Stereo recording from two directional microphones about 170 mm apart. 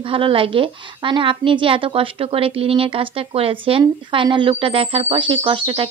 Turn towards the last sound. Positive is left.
turn(degrees=-30)  # may be behind; listen again after turning